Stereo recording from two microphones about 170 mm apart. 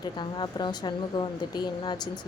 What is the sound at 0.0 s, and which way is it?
Speech, 25° left (ahead or behind).